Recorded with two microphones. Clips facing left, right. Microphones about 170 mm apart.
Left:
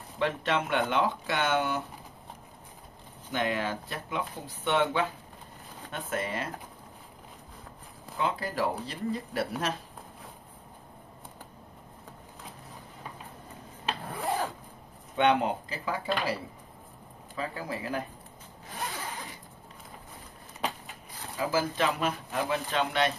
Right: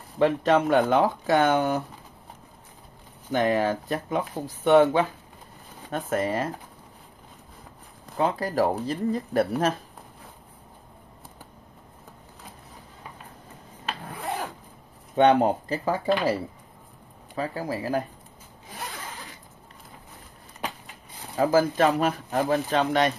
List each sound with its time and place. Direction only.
0.2 s speech: 40° right (ahead or behind)
3.3 s speech: 45° right (ahead or behind)
8.2 s speech: 45° right (ahead or behind)
15.1 s speech: 45° right (ahead or behind)
17.4 s speech: 40° right (ahead or behind)
21.4 s speech: 45° right (ahead or behind)